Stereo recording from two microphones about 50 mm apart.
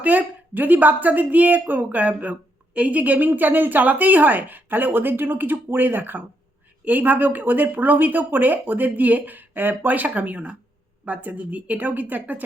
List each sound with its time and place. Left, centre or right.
0.0 s a woman's voice: right